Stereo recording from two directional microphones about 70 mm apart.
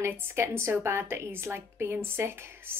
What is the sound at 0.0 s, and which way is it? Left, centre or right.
Speech, right.